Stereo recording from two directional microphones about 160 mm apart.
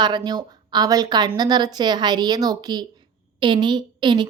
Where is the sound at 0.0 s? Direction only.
25° right (ahead or behind).